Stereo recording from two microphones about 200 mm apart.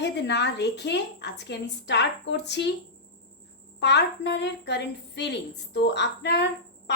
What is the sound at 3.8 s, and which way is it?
A woman's voice, 60° left (ahead or behind).